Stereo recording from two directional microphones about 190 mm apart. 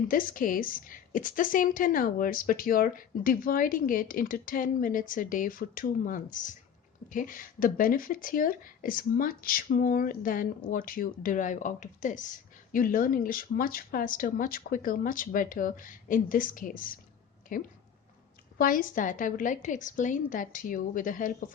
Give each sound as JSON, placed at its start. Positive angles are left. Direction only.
{"t": 0.1, "sound": "a woman's voice", "side_deg": 45}